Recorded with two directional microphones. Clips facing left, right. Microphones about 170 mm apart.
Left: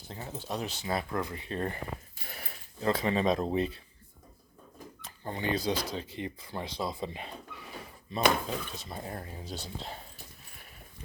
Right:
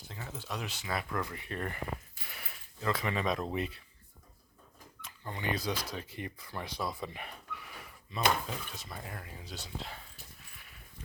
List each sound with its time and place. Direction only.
0.1 s speech: 30° left (ahead or behind)
5.0 s speech: 30° left (ahead or behind)